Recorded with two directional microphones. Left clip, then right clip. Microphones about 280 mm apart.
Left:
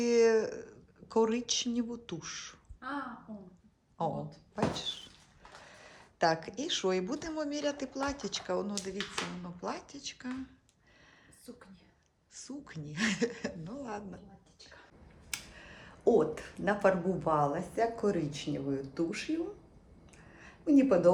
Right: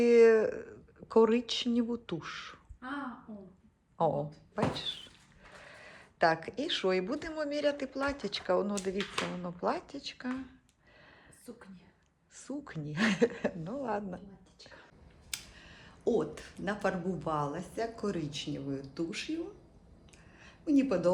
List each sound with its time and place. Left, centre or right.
0.0 s speech: centre
3.9 s speech: centre
12.3 s speech: centre
15.3 s speech: centre
20.3 s a sound: centre